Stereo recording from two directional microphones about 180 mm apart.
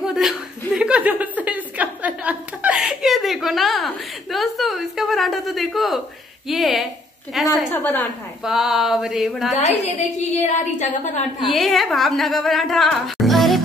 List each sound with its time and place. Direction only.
0.0 s chuckle: 5° right (ahead or behind)
6.5 s a woman's voice: centre (ahead or behind)
7.3 s a sound: centre (ahead or behind)
7.7 s a woman's voice: 10° left (ahead or behind)
8.5 s a woman's voice: centre (ahead or behind)
9.6 s a sound: 35° left (ahead or behind)
11.4 s a woman's voice: centre (ahead or behind)